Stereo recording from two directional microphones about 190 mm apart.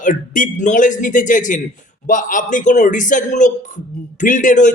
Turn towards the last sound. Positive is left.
turn(degrees=40)  # may be behind; listen again after turning